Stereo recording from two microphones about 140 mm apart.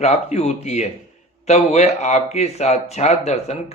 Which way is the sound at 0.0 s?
50° left (ahead or behind).